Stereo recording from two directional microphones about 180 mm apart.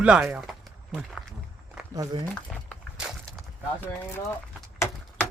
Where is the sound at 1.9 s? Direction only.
20° right (ahead or behind).